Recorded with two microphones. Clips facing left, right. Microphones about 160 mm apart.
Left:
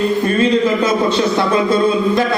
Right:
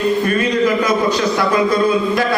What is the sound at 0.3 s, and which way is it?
A man's voice, 25° left (ahead or behind).